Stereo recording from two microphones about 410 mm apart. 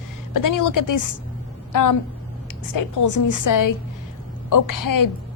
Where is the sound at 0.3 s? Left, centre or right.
Left.